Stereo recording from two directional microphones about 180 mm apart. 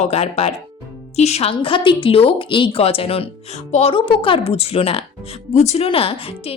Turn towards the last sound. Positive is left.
turn(degrees=30)  # may be behind; listen again after turning